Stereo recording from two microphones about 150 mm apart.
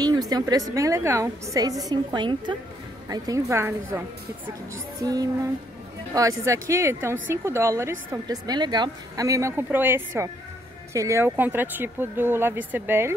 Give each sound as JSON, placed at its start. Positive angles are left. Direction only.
{"t": 0.0, "sound": "a woman's voice", "side_deg": -25}
{"t": 5.0, "sound": "a woman's voice", "side_deg": -25}